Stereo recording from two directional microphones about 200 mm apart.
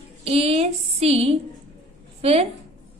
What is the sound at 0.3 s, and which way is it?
A woman's voice, 30° right (ahead or behind).